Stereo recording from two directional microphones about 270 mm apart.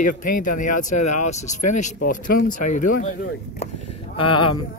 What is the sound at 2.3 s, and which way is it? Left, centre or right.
Speech, left.